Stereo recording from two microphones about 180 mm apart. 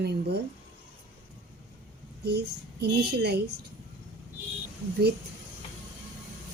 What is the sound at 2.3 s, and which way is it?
A child's voice, 65° right (ahead or behind).